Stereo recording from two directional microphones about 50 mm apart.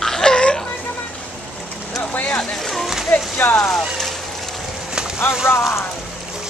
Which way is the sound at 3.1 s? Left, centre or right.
Left.